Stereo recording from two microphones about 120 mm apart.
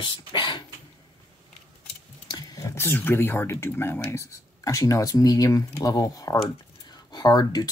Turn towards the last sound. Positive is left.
turn(degrees=35)  # may be behind; listen again after turning